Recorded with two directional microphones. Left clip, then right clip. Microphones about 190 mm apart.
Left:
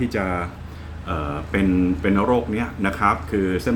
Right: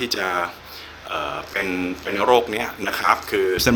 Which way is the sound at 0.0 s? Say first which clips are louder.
Right 2 dB; 20° right (ahead or behind).